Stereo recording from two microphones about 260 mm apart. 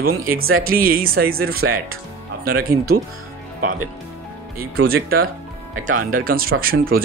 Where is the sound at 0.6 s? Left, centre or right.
Right.